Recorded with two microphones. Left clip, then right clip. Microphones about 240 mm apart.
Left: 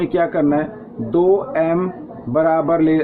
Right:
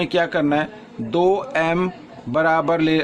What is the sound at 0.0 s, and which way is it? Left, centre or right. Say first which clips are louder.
A man's voice: left 2 dB; right.